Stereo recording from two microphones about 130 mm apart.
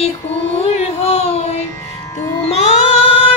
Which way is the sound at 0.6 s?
55° left (ahead or behind).